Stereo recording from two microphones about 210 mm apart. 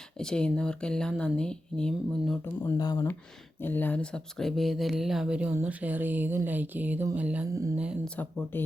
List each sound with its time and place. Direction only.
0.2 s speech: 5° left (ahead or behind)
2.6 s speech: 20° left (ahead or behind); by 7.0 s 10° right (ahead or behind)
7.2 s mantra: 5° right (ahead or behind)
8.1 s speech: 5° left (ahead or behind)